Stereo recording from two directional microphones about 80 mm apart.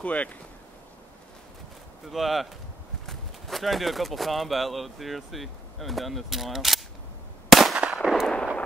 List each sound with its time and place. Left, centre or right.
0.0 s speech: centre
2.0 s speech: centre
7.4 s a sound: centre
7.9 s artillery fire: centre